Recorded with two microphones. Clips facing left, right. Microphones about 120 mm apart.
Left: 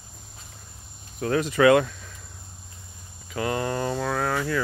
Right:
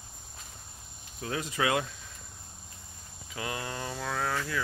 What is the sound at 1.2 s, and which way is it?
Speech, 70° left (ahead or behind).